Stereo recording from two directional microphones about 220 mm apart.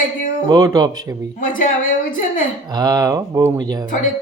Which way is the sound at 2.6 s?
15° right (ahead or behind).